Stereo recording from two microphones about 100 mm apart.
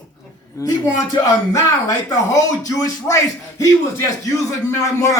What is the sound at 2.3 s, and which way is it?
Speech, 30° left (ahead or behind).